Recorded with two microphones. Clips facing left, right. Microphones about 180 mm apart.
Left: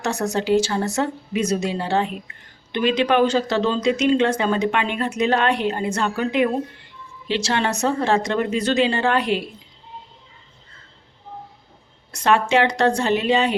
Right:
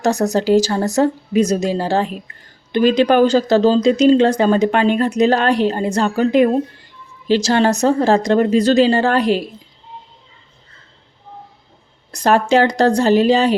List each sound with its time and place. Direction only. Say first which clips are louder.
0.0 s speech: right 7 dB; 40° right (ahead or behind)
12.1 s speech: right 4 dB; 40° right (ahead or behind)